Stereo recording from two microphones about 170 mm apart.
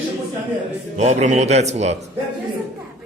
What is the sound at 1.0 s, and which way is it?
Speech, 45° right (ahead or behind).